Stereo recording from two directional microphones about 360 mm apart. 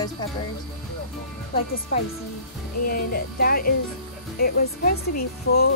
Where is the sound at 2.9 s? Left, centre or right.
Left.